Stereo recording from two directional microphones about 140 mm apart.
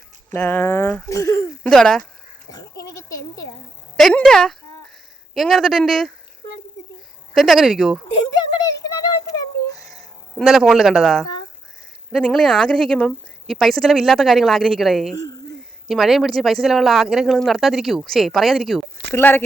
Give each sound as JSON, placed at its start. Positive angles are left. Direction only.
{"t": 0.3, "sound": "speech", "side_deg": 15}
{"t": 1.7, "sound": "speech", "side_deg": 5}
{"t": 2.5, "sound": "goat", "side_deg": 25}
{"t": 3.9, "sound": "speech", "side_deg": 5}
{"t": 7.3, "sound": "speech", "side_deg": 0}
{"t": 8.1, "sound": "a sound", "side_deg": 30}
{"t": 9.7, "sound": "a sound", "side_deg": 0}
{"t": 12.1, "sound": "speech", "side_deg": 0}
{"t": 15.1, "sound": "speech", "side_deg": 25}
{"t": 15.9, "sound": "speech", "side_deg": 0}
{"t": 19.1, "sound": "speech", "side_deg": 15}